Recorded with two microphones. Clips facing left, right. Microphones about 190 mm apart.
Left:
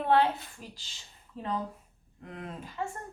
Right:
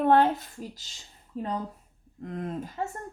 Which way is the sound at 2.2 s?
40° right (ahead or behind).